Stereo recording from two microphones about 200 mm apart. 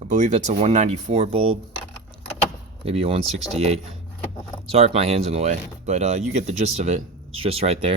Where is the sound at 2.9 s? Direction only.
30° right (ahead or behind).